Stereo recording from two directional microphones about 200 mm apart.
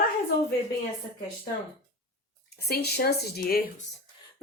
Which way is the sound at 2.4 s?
55° left (ahead or behind).